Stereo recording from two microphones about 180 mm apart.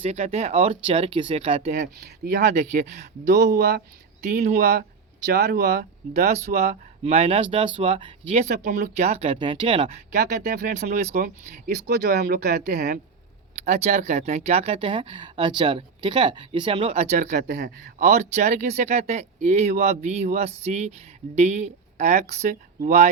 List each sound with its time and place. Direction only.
0.0 s speech: 35° right (ahead or behind)
2.0 s speech: 60° right (ahead or behind)
2.5 s speech: 40° right (ahead or behind)
3.3 s speech: 65° right (ahead or behind)
4.4 s speech: 45° right (ahead or behind)
5.2 s speech: 60° right (ahead or behind)
6.1 s speech: 40° right (ahead or behind)
8.6 s speech: 50° right (ahead or behind)
9.0 s speech: 35° right (ahead or behind)
10.4 s speech: 55° right (ahead or behind)
11.9 s speech: 60° right (ahead or behind)
13.7 s speech: 40° right (ahead or behind)
17.3 s speech: 60° right (ahead or behind)
18.1 s speech: 40° right (ahead or behind)